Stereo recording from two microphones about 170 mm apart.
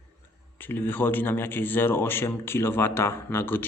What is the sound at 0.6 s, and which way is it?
Speech, 10° left (ahead or behind).